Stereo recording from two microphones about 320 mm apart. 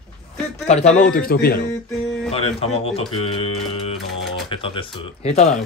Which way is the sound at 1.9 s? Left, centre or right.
Centre.